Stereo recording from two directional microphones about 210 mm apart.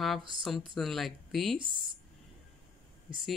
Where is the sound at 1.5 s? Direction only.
25° right (ahead or behind).